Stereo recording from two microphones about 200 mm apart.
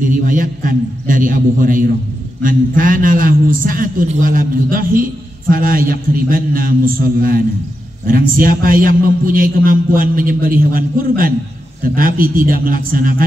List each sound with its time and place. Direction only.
0.0 s a man's voice: 40° right (ahead or behind)